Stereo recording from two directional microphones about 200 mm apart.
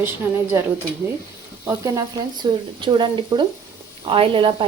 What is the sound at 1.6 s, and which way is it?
Speech, 15° right (ahead or behind).